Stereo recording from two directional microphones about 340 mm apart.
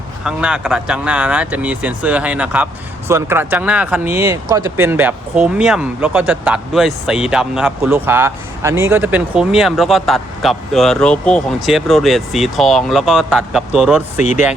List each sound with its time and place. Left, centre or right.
0.3 s speech: centre
14.2 s speech: left